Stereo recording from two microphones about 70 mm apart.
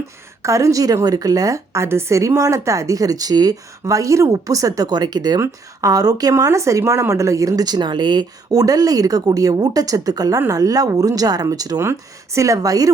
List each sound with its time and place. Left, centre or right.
0.4 s speech: right
3.8 s speech: right
4.9 s speech: right
5.4 s speech: right
7.6 s speech: right
11.8 s speech: right